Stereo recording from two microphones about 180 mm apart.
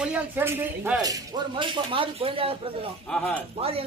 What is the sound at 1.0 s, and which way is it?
Speech, 25° right (ahead or behind).